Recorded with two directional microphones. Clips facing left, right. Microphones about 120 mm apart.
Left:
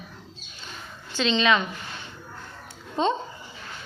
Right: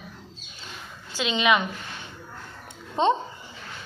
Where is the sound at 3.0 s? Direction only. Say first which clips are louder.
Right 3 dB; 20° right (ahead or behind).